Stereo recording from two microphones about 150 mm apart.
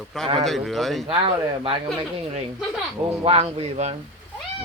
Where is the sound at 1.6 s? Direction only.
40° right (ahead or behind).